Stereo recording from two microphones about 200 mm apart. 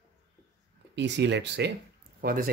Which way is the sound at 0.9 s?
60° right (ahead or behind).